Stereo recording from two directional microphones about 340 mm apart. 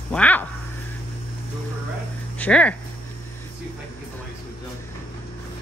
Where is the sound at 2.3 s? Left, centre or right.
Centre.